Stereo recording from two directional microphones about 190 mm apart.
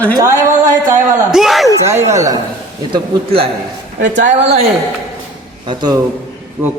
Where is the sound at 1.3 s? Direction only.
Centre (ahead or behind).